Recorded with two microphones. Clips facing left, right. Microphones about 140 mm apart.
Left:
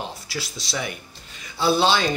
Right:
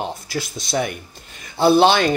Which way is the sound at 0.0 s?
50° right (ahead or behind).